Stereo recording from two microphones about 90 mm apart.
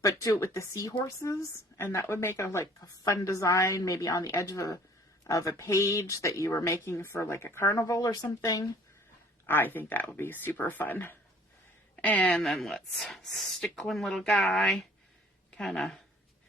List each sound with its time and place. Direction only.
0.0 s speech: 40° left (ahead or behind)
9.5 s speech: 20° left (ahead or behind)
12.4 s speech: 5° left (ahead or behind)